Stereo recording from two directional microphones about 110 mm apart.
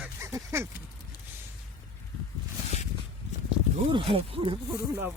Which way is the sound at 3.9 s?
60° right (ahead or behind).